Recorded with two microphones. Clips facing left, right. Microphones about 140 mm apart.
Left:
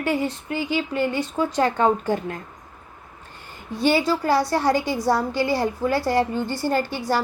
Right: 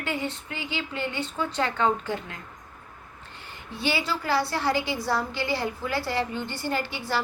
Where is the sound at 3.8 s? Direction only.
45° left (ahead or behind).